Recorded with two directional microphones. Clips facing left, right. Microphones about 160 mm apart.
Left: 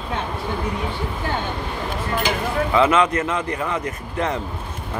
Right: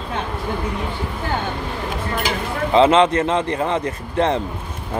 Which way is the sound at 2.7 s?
25° right (ahead or behind).